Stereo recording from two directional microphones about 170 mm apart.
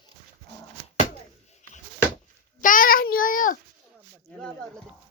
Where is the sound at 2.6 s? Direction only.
55° left (ahead or behind).